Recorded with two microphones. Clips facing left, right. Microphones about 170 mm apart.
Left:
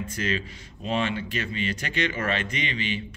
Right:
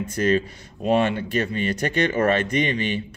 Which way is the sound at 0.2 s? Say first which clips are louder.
Right 10 dB; 45° right (ahead or behind).